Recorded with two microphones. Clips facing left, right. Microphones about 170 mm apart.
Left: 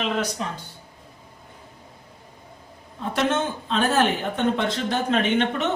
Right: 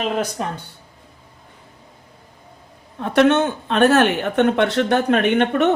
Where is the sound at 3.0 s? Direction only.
65° right (ahead or behind).